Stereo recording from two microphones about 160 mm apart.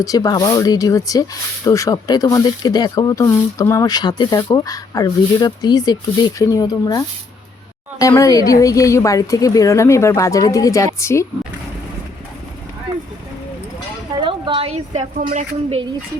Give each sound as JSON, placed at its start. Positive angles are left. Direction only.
{"t": 0.0, "sound": "speech", "side_deg": 20}
{"t": 14.2, "sound": "a woman's voice", "side_deg": -30}